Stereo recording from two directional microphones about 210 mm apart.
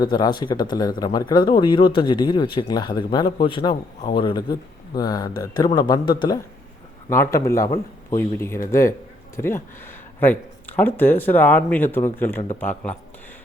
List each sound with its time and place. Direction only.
0.0 s a man's voice: 20° left (ahead or behind)